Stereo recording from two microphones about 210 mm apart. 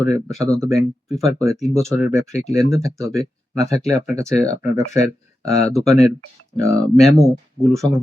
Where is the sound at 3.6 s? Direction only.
15° right (ahead or behind).